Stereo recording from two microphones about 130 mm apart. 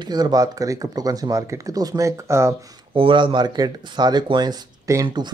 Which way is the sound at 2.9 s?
40° right (ahead or behind).